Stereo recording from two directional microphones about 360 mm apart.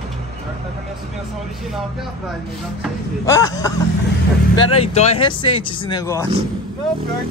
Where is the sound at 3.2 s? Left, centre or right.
Centre.